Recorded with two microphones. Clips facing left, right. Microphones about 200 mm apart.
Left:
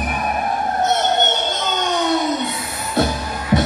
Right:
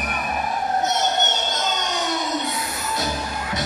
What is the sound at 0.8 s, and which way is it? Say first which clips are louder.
Vehicle: left 6 dB; 55° left (ahead or behind).